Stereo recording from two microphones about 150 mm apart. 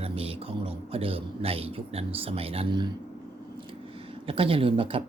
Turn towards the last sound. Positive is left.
turn(degrees=-40)  # may be behind; listen again after turning